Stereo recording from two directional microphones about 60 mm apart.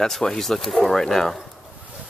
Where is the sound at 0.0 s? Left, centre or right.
Centre.